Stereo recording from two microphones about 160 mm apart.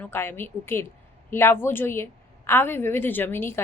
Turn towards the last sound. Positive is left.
turn(degrees=15)  # may be behind; listen again after turning